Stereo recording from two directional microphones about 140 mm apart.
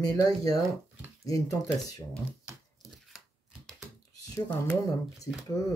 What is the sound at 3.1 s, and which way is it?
Scissors, 5° right (ahead or behind).